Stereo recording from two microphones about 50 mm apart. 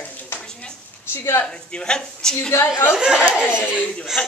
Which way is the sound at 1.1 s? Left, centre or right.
Left.